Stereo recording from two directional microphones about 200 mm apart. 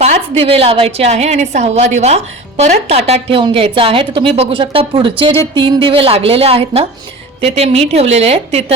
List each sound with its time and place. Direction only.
0.0 s a woman's voice: 30° right (ahead or behind)